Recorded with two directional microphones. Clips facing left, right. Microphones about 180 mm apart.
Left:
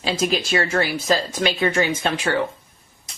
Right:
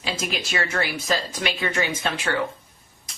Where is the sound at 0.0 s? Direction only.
35° left (ahead or behind).